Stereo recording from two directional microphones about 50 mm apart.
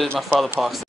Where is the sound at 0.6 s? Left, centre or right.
Centre.